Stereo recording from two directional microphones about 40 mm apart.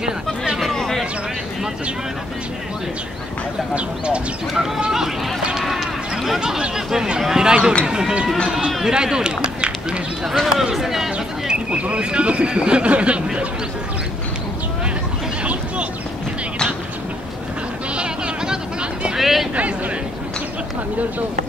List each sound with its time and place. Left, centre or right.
0.7 s vehicle: centre
3.7 s speech: right
4.6 s speech: centre
11.7 s speech: right
17.9 s a sound: right
19.1 s speech: centre